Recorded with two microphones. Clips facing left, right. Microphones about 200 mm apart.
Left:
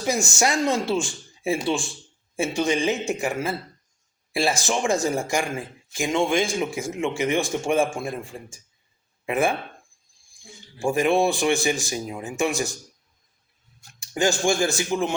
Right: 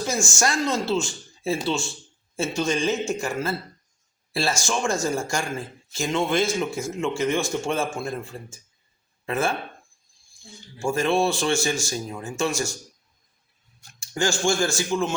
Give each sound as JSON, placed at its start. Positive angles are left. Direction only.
{"t": 0.0, "sound": "speech", "side_deg": 20}
{"t": 14.0, "sound": "speech", "side_deg": 20}